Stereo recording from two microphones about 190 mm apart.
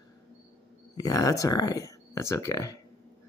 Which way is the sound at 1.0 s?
20° left (ahead or behind).